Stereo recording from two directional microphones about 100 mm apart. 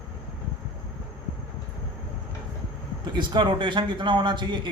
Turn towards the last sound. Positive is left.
turn(degrees=-50)  # may be behind; listen again after turning